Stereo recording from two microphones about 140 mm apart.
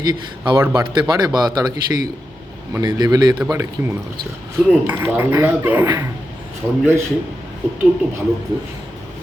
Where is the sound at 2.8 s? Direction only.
30° right (ahead or behind).